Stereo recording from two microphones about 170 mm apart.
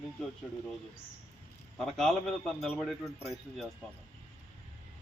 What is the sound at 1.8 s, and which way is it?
A man's voice, 5° left (ahead or behind).